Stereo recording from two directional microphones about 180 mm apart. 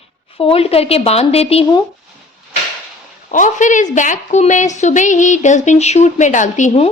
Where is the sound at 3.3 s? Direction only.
45° left (ahead or behind).